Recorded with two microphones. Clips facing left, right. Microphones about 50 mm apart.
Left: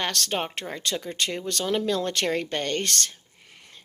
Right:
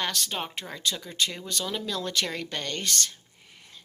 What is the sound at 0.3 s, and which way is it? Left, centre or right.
Speech, left.